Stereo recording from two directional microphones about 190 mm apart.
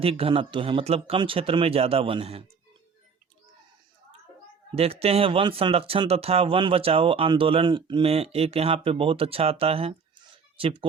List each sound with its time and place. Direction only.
0.0 s speech: 30° right (ahead or behind)
4.7 s speech: 30° right (ahead or behind)